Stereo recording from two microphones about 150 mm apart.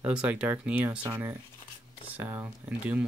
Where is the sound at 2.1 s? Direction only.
10° right (ahead or behind).